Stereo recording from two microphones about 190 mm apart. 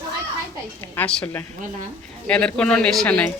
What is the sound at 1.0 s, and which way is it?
A woman's voice, 5° left (ahead or behind).